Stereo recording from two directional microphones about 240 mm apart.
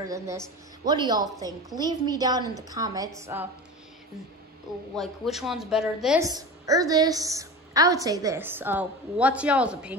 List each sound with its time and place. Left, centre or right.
0.0 s a woman's voice: centre
4.9 s a woman's voice: centre
6.2 s a woman's voice: centre